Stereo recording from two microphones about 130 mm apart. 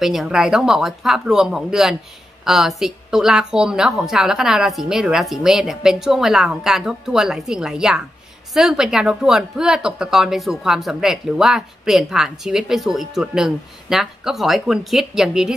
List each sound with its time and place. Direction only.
0.0 s a woman's voice: centre (ahead or behind)